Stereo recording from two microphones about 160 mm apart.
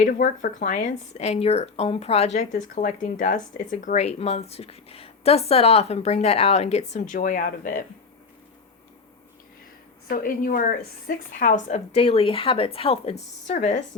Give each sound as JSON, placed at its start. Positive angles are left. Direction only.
{"t": 0.0, "sound": "speech", "side_deg": 55}
{"t": 10.1, "sound": "speech", "side_deg": 60}